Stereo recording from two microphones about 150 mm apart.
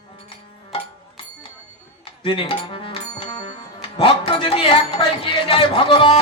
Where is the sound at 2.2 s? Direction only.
35° left (ahead or behind).